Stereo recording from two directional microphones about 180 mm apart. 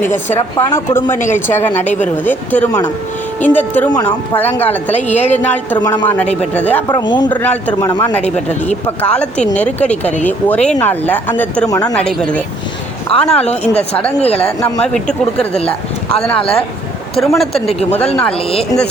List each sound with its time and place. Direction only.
0.0 s speech: 40° left (ahead or behind)
0.5 s speech: 15° left (ahead or behind)
5.8 s a man's voice: 20° left (ahead or behind)
6.5 s speech: 10° left (ahead or behind)
6.8 s a man's voice: 25° left (ahead or behind)
7.3 s a man's voice: 10° left (ahead or behind)
8.2 s speech: 40° left (ahead or behind)
9.0 s speech: 5° left (ahead or behind)
13.4 s speech: 35° left (ahead or behind)
14.9 s speech: 5° left (ahead or behind)
17.2 s speech: centre (ahead or behind)